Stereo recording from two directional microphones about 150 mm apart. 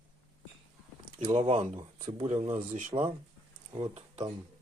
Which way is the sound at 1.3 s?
45° right (ahead or behind).